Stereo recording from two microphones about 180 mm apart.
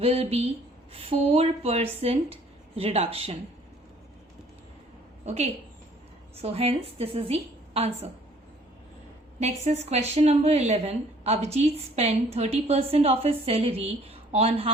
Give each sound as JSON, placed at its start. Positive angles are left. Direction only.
{"t": 0.0, "sound": "a woman's voice", "side_deg": -35}
{"t": 5.2, "sound": "a woman's voice", "side_deg": -35}
{"t": 9.4, "sound": "a woman's voice", "side_deg": -40}